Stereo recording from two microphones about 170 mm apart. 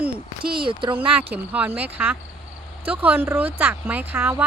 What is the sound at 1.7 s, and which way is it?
Speech, 10° right (ahead or behind).